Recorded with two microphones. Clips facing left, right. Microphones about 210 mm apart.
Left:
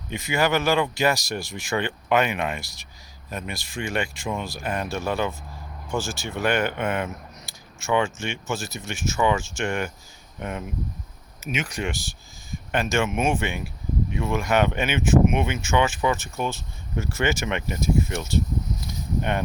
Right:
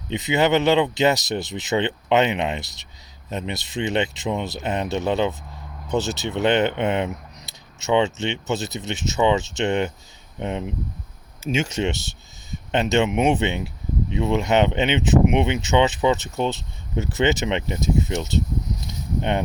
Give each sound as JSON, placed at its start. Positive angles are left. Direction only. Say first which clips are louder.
{"t": 0.1, "sound": "speech", "louder": "right 4 dB", "side_deg": -20}